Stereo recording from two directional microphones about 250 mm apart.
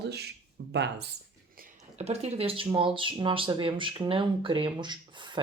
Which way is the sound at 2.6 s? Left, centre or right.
Centre.